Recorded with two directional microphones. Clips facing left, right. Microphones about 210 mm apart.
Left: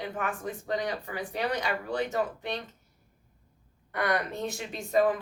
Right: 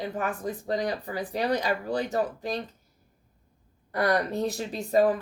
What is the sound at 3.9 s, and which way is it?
Speech, 35° right (ahead or behind).